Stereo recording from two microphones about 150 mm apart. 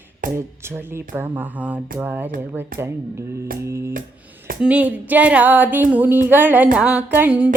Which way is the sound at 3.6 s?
20° right (ahead or behind).